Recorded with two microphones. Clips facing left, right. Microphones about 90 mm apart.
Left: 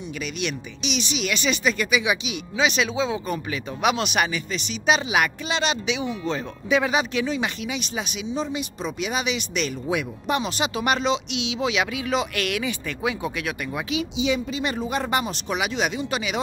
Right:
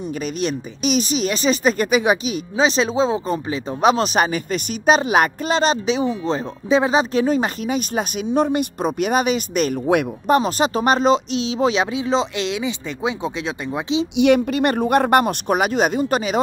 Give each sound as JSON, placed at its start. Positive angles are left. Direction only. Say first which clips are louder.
{"t": 0.4, "sound": "speech", "louder": "right 7 dB", "side_deg": -40}
{"t": 10.3, "sound": "speech", "louder": "right 8 dB", "side_deg": -40}
{"t": 14.1, "sound": "speech", "louder": "right 11 dB", "side_deg": -60}